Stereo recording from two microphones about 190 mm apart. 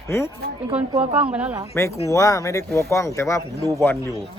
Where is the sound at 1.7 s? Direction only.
15° left (ahead or behind).